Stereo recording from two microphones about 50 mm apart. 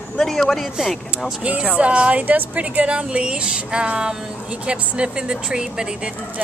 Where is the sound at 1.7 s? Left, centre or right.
Right.